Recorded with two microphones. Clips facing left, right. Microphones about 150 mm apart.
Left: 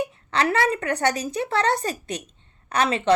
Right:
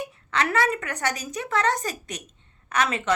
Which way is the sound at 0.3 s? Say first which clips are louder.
Left 2 dB; 30° left (ahead or behind).